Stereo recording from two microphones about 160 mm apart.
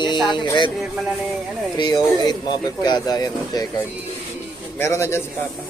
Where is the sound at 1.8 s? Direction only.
25° left (ahead or behind).